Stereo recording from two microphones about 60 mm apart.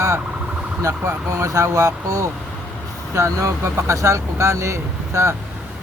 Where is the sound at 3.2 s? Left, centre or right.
Right.